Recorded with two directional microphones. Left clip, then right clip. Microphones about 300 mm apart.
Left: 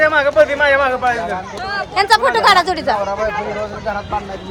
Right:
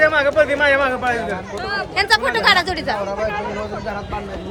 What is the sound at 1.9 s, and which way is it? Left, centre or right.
Speech, centre.